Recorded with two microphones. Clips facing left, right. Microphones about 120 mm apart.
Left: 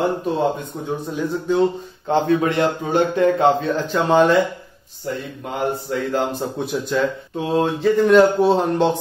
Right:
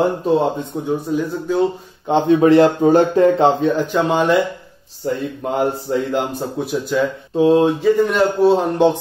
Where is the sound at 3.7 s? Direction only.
10° right (ahead or behind).